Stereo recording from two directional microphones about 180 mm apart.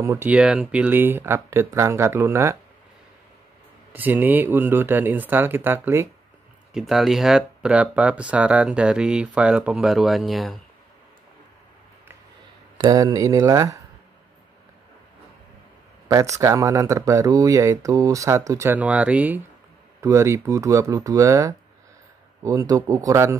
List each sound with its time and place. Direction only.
0.0 s speech: 15° right (ahead or behind)
3.9 s speech: 10° right (ahead or behind)
6.7 s speech: centre (ahead or behind)
12.7 s speech: 20° right (ahead or behind)
16.1 s speech: 15° right (ahead or behind)